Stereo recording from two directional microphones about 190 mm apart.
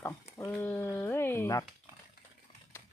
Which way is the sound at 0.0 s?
15° left (ahead or behind).